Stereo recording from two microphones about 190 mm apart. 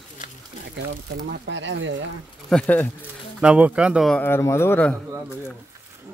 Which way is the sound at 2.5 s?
5° left (ahead or behind).